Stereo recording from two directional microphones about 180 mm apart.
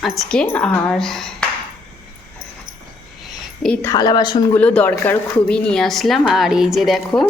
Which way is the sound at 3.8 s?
25° left (ahead or behind).